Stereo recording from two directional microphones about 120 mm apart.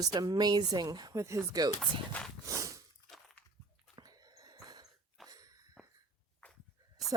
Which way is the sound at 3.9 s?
35° right (ahead or behind).